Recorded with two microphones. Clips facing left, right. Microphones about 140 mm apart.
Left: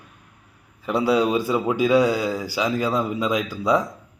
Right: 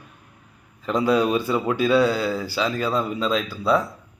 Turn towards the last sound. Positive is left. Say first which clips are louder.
# even
turn(degrees=15)  # may be behind; listen again after turning